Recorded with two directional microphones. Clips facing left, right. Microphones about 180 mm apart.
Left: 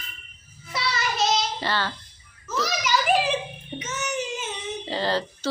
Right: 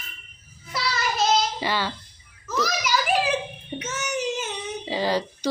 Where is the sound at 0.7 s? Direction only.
Centre (ahead or behind).